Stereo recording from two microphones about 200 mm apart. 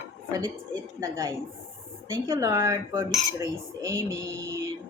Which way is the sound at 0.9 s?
15° right (ahead or behind).